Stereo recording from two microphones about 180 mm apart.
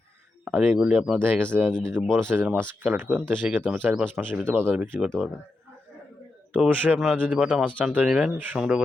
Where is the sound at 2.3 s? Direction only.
10° right (ahead or behind).